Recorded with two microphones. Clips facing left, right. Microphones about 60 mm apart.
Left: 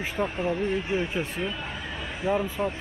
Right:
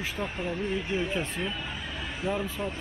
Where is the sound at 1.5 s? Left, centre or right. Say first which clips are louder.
Left 2 dB; left.